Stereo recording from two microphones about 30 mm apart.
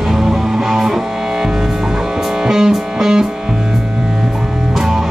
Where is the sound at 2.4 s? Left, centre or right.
Centre.